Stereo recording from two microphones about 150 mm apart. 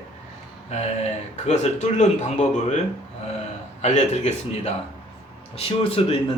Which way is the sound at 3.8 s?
50° left (ahead or behind).